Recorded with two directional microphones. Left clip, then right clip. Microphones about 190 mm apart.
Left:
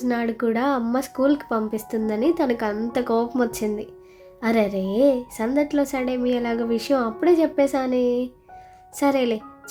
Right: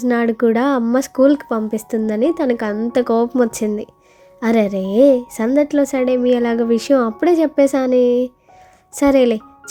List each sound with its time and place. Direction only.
0.0 s a woman's voice: 35° right (ahead or behind)